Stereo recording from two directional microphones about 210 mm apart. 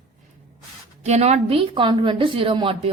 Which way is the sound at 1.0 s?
30° right (ahead or behind).